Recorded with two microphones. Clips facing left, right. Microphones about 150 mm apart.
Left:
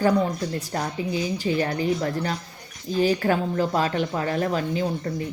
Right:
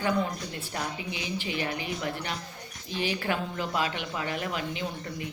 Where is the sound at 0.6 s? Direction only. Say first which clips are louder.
Left 7 dB; 40° left (ahead or behind).